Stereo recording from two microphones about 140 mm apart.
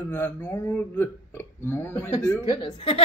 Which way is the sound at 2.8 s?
40° left (ahead or behind).